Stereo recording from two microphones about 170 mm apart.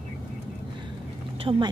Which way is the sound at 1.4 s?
30° right (ahead or behind).